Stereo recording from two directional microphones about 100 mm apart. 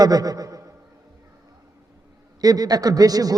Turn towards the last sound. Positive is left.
turn(degrees=-40)  # may be behind; listen again after turning